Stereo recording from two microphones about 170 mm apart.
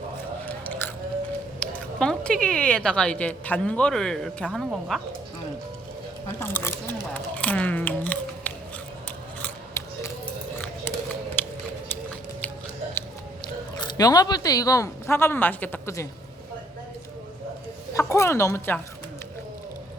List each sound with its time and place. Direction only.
0.4 s biting: 10° left (ahead or behind)
1.5 s speech: 5° left (ahead or behind)
6.4 s a woman's voice: 15° left (ahead or behind)
7.1 s a sound: 10° left (ahead or behind)
9.0 s scissors: 10° left (ahead or behind)
10.9 s a sound: 15° left (ahead or behind)
13.4 s speech: 25° left (ahead or behind)
17.9 s a woman's voice: 15° left (ahead or behind)